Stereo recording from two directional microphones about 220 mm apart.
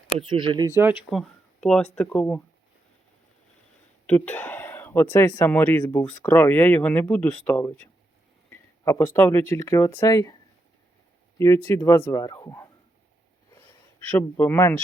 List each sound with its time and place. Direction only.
0.2 s speech: 20° right (ahead or behind); by 2.4 s 5° left (ahead or behind)
4.0 s speech: 5° left (ahead or behind)
11.3 s speech: 10° left (ahead or behind)
13.5 s a sound: 10° left (ahead or behind)